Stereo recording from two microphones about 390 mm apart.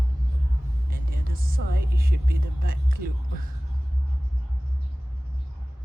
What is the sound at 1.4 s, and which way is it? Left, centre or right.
Speech, right.